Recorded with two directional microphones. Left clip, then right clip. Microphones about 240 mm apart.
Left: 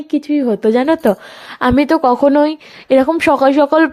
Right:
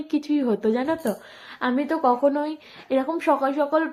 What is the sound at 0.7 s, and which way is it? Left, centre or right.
A woman's voice, left.